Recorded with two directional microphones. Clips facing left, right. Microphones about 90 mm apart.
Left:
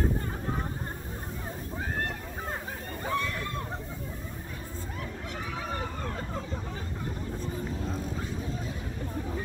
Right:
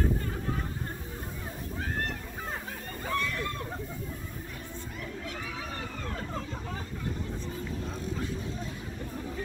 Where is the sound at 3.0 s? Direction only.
15° left (ahead or behind).